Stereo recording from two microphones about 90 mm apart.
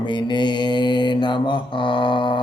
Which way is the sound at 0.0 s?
60° left (ahead or behind).